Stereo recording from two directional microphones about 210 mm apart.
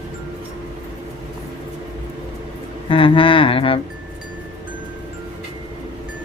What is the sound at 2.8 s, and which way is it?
Speech, 25° left (ahead or behind).